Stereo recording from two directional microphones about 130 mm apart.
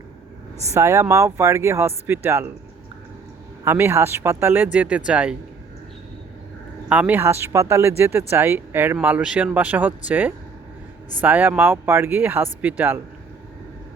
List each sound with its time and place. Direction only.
0.7 s speech: 25° right (ahead or behind)
3.6 s speech: 20° right (ahead or behind)
6.8 s speech: 10° right (ahead or behind)